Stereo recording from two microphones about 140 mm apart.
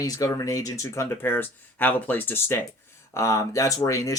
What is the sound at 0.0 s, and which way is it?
Speech, 25° left (ahead or behind).